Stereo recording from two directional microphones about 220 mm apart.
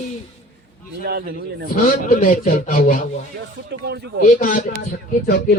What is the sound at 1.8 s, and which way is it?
A man's voice, 40° left (ahead or behind).